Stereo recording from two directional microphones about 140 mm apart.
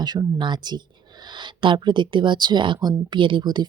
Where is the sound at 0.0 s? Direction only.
30° right (ahead or behind).